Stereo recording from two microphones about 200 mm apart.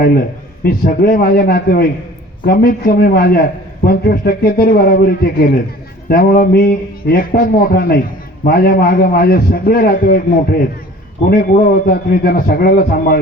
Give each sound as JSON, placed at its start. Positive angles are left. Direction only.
{"t": 0.0, "sound": "a man's voice", "side_deg": 50}